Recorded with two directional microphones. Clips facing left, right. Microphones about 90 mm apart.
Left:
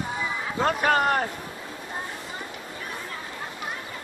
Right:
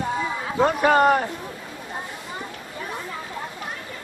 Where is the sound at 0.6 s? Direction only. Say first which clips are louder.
Right 5 dB; 5° right (ahead or behind).